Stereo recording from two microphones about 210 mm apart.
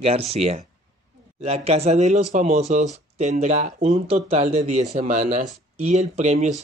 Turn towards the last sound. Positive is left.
turn(degrees=-35)  # may be behind; listen again after turning